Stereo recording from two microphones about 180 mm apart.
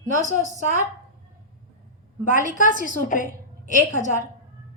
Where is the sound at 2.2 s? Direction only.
45° left (ahead or behind).